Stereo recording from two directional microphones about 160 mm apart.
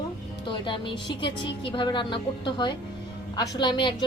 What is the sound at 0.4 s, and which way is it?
A woman's voice, 30° left (ahead or behind).